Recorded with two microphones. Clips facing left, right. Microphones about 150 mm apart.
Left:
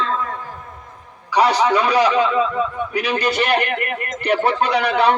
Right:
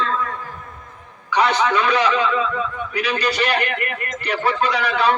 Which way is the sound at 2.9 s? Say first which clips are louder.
Left 2 dB; 50° left (ahead or behind).